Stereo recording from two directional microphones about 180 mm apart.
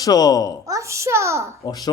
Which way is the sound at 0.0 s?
20° left (ahead or behind).